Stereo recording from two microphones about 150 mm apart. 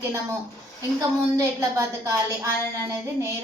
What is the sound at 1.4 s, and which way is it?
A woman's voice, 20° right (ahead or behind).